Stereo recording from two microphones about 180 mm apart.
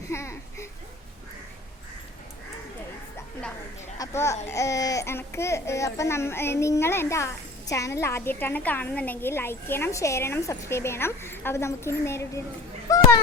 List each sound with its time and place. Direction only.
0.1 s a sound: 15° left (ahead or behind)
3.9 s speech: 15° left (ahead or behind)
12.9 s children playing: 20° left (ahead or behind)